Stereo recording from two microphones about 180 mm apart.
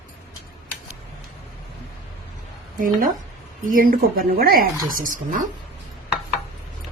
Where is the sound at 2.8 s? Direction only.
50° right (ahead or behind).